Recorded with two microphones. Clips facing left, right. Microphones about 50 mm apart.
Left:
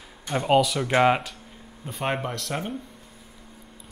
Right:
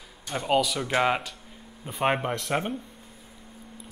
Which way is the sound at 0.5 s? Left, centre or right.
Centre.